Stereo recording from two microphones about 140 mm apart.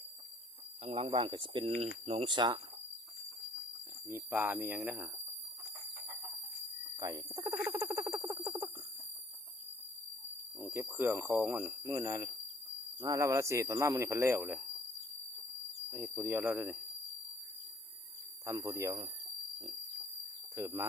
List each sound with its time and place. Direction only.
0.9 s speech: 40° right (ahead or behind)
4.1 s speech: 10° right (ahead or behind)
6.9 s rodents: 25° right (ahead or behind)
10.6 s speech: 15° right (ahead or behind)
16.1 s speech: 10° right (ahead or behind)
18.4 s speech: 25° right (ahead or behind)
20.6 s speech: 20° right (ahead or behind)